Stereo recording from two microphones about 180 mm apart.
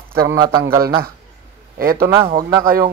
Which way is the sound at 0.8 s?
55° right (ahead or behind).